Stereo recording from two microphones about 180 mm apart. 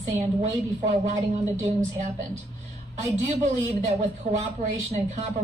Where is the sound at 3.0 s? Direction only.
45° right (ahead or behind).